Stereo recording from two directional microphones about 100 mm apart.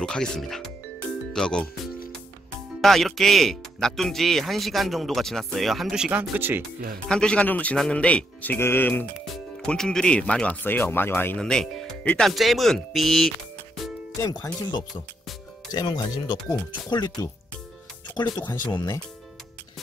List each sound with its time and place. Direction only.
0.0 s speech: 5° left (ahead or behind)
2.8 s speech: centre (ahead or behind)
6.3 s speech: 20° right (ahead or behind)
7.1 s speech: 10° left (ahead or behind)
9.2 s speech: 5° left (ahead or behind); by 11.3 s 20° left (ahead or behind)
11.3 s speech: 5° left (ahead or behind)
14.4 s speech: 40° left (ahead or behind)
18.1 s speech: 45° left (ahead or behind)